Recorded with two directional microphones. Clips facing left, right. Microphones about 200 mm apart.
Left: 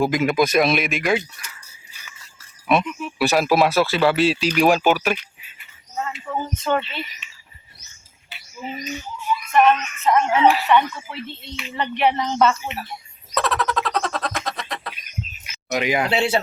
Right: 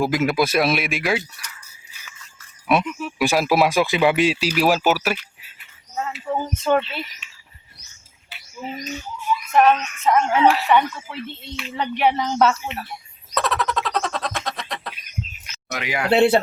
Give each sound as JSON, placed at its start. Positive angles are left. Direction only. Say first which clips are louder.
{"t": 0.0, "sound": "a woman's voice", "louder": "left 1 dB", "side_deg": 0}
{"t": 2.6, "sound": "a woman's voice", "louder": "even", "side_deg": -10}
{"t": 8.3, "sound": "bird", "louder": "even", "side_deg": 0}
{"t": 9.5, "sound": "a woman's voice", "louder": "even", "side_deg": -10}
{"t": 13.3, "sound": "frog", "louder": "left 1 dB", "side_deg": 0}
{"t": 15.4, "sound": "a sound", "louder": "left 8 dB", "side_deg": 20}
{"t": 16.0, "sound": "speech", "louder": "right 5 dB", "side_deg": -55}